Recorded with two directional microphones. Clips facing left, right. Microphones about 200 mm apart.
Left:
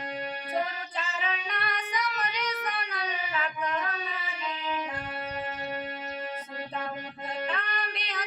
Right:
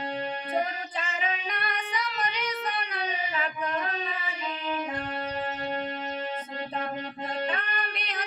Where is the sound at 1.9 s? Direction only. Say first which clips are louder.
Left 1 dB; 30° right (ahead or behind).